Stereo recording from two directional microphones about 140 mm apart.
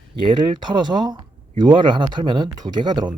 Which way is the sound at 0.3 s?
35° right (ahead or behind).